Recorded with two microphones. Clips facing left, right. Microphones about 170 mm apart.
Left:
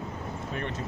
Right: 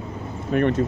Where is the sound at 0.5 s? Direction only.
65° right (ahead or behind).